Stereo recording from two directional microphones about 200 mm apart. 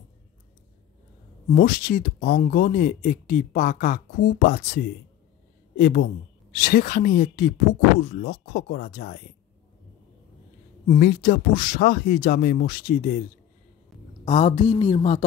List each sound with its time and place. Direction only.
1.5 s speech: 50° left (ahead or behind)
10.9 s speech: 50° left (ahead or behind)
14.2 s a woman's voice: 35° left (ahead or behind)